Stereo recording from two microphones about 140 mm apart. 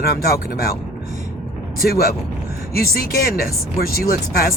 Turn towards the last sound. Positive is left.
turn(degrees=90)